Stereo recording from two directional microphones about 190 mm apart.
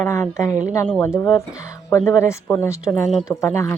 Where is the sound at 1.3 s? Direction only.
15° left (ahead or behind).